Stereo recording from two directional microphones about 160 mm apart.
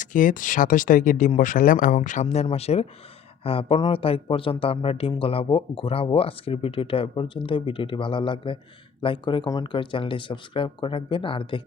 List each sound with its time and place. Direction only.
0.0 s speech: 55° left (ahead or behind); by 11.6 s 35° left (ahead or behind)